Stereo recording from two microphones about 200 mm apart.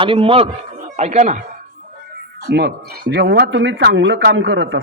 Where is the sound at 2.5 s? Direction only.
60° right (ahead or behind).